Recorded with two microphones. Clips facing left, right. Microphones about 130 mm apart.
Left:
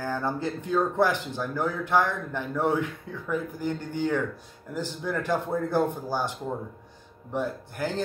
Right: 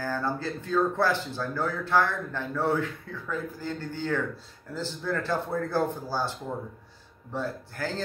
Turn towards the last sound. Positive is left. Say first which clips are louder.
# left 2 dB
turn(degrees=15)  # may be behind; listen again after turning